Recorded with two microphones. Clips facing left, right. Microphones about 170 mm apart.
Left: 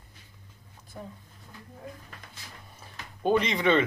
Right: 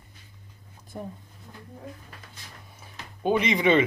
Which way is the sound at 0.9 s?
40° right (ahead or behind).